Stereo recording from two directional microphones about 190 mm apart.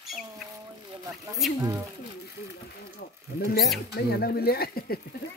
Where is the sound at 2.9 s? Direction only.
50° left (ahead or behind).